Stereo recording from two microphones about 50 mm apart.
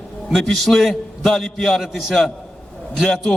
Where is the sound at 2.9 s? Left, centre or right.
Centre.